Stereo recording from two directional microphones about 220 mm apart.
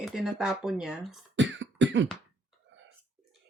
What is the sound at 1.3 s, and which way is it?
Cough, 55° right (ahead or behind).